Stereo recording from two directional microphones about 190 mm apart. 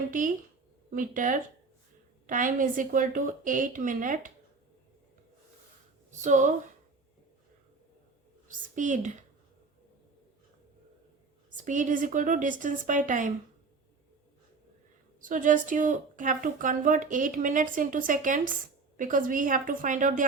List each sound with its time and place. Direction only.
0.1 s a woman's voice: 45° right (ahead or behind)
6.1 s speech: 40° right (ahead or behind)
8.4 s a woman's voice: 40° right (ahead or behind)
11.5 s a woman's voice: 40° right (ahead or behind)
15.2 s a woman's voice: 45° right (ahead or behind)